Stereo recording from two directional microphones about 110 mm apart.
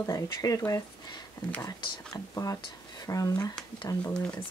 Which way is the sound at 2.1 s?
30° left (ahead or behind).